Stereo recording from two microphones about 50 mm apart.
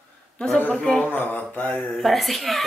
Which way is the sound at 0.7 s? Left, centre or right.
Left.